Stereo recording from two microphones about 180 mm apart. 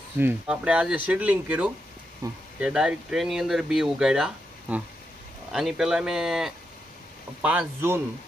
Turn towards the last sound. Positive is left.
turn(degrees=-10)  # may be behind; listen again after turning